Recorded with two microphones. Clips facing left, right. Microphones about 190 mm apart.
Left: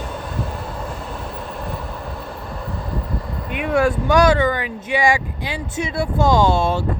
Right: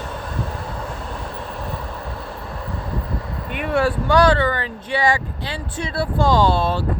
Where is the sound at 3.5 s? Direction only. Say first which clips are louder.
Left 2 dB; centre (ahead or behind).